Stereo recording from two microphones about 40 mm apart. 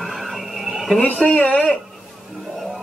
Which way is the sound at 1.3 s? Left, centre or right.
Left.